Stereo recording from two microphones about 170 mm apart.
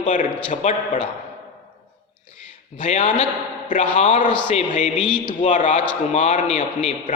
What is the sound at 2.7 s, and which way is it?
A man's voice, 45° left (ahead or behind).